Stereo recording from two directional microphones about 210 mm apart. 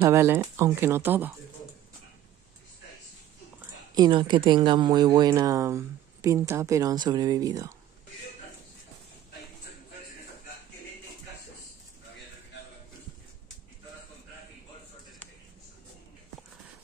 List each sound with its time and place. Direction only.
0.0 s speech: 10° right (ahead or behind)
3.9 s speech: 20° right (ahead or behind)